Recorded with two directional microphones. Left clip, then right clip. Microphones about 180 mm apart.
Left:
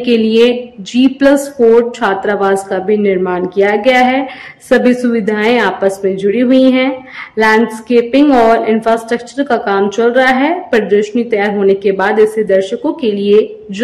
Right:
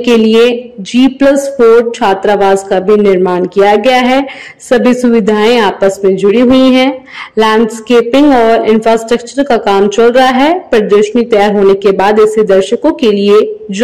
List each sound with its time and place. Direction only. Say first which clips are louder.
0.0 s a woman's voice: right 3 dB; 20° right (ahead or behind)